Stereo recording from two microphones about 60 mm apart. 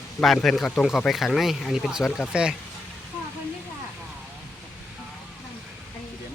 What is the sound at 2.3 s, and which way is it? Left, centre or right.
Speech, centre.